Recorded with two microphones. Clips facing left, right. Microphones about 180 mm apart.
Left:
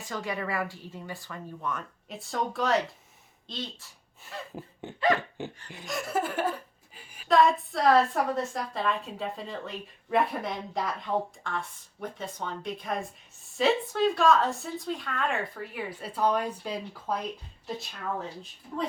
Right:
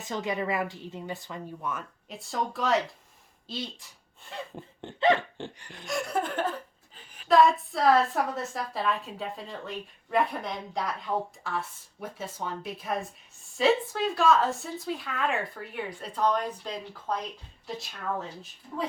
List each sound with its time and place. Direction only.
0.0 s speech: 20° right (ahead or behind)
1.6 s a woman's voice: centre (ahead or behind)
4.2 s a woman's voice: 5° left (ahead or behind)
4.9 s speech: 25° right (ahead or behind)
5.7 s chuckle: centre (ahead or behind)
7.3 s a woman's voice: centre (ahead or behind)